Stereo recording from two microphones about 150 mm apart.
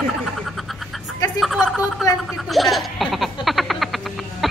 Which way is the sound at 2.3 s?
Centre (ahead or behind).